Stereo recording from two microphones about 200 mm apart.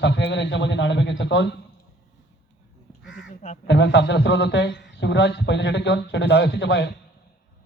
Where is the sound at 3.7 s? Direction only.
65° left (ahead or behind).